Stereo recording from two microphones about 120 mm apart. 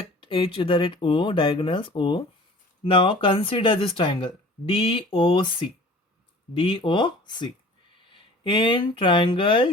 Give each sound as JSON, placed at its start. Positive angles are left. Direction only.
{"t": 0.2, "sound": "speech", "side_deg": 50}